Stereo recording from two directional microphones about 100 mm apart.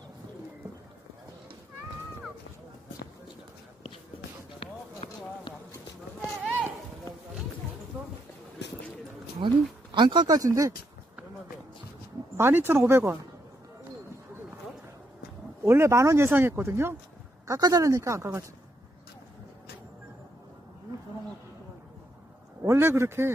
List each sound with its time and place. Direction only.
4.6 s run: 55° left (ahead or behind)
9.4 s speech: 55° right (ahead or behind); by 10.7 s 35° right (ahead or behind)
12.4 s speech: 20° right (ahead or behind)
15.6 s speech: 25° right (ahead or behind)
17.5 s speech: 40° right (ahead or behind)
22.6 s a man's voice: 25° right (ahead or behind)